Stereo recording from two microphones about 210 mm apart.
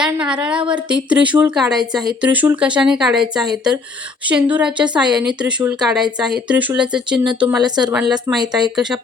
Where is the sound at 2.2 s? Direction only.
5° right (ahead or behind).